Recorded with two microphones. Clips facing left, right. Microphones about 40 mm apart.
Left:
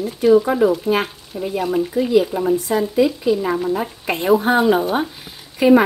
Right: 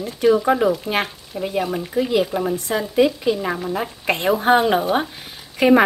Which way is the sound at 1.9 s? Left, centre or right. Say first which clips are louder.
Left 1 dB; right.